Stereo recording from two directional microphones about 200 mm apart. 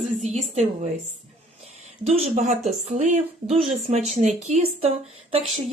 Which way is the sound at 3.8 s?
30° right (ahead or behind).